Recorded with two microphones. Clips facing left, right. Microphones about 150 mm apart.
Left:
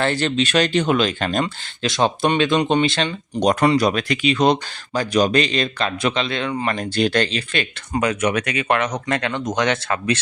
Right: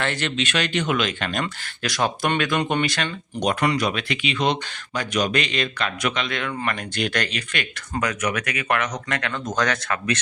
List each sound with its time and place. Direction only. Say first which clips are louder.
0.0 s speech: left 6 dB; 35° left (ahead or behind)